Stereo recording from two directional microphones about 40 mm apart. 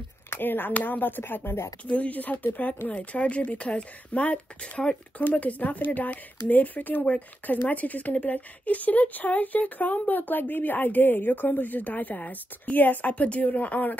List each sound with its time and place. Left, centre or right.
0.3 s speech: left
1.9 s speech: left
2.9 s speech: left
13.1 s speech: left